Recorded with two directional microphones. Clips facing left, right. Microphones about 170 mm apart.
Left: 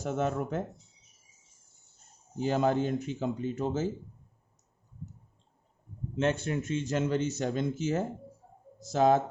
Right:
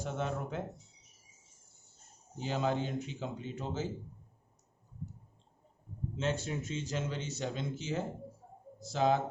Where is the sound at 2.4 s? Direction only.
50° left (ahead or behind).